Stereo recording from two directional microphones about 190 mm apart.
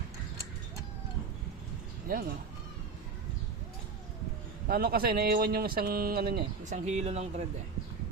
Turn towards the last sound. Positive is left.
turn(degrees=-35)  # may be behind; listen again after turning